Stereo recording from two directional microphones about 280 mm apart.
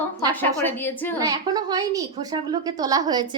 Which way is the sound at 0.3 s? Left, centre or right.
Centre.